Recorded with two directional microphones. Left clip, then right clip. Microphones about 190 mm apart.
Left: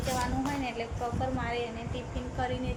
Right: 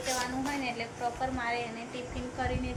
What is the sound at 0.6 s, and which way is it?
A woman's voice, 10° left (ahead or behind).